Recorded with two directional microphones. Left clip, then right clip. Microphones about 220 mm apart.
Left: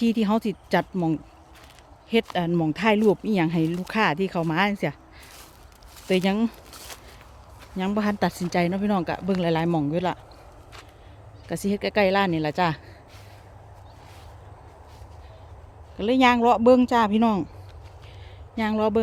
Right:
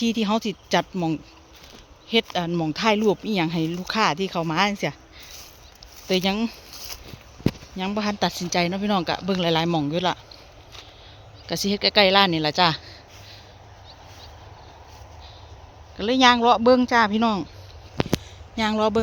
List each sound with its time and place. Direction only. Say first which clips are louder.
0.1 s speech: even; 15° left (ahead or behind)
6.1 s speech: even; 15° left (ahead or behind)
7.8 s speech: left 1 dB; 20° left (ahead or behind)
11.4 s speech: right 4 dB; 10° left (ahead or behind)
16.0 s speech: right 2 dB; 10° left (ahead or behind)
18.5 s speech: right 2 dB; 10° left (ahead or behind)